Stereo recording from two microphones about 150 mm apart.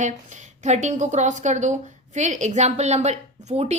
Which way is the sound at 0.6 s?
50° right (ahead or behind).